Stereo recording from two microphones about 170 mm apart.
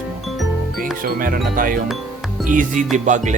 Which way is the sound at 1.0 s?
55° right (ahead or behind).